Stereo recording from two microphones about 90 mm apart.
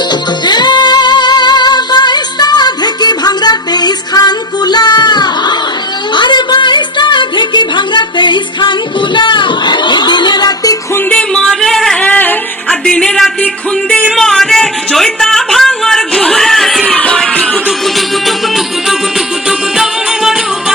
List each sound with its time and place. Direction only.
0.1 s music: 55° left (ahead or behind)
11.1 s music: 10° left (ahead or behind)
12.0 s music: 20° left (ahead or behind)
12.8 s music: 10° left (ahead or behind)
16.9 s music: 15° left (ahead or behind)
17.7 s music: centre (ahead or behind)